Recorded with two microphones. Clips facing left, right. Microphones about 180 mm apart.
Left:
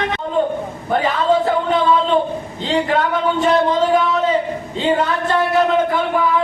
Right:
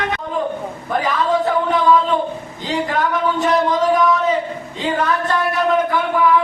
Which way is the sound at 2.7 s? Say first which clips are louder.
Left 2 dB; 25° left (ahead or behind).